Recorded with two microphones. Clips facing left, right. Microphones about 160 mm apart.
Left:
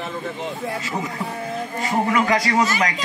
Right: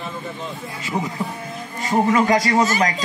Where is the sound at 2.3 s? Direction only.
25° right (ahead or behind).